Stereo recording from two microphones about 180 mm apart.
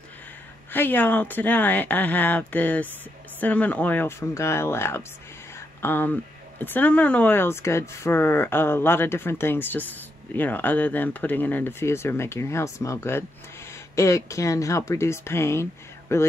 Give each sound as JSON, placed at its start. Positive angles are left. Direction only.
{"t": 0.7, "sound": "speech", "side_deg": 10}